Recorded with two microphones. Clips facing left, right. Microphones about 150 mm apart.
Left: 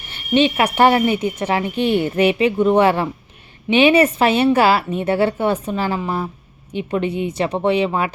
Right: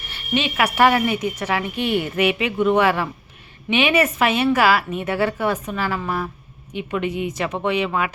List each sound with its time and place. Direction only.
0.1 s a woman's voice: 30° left (ahead or behind)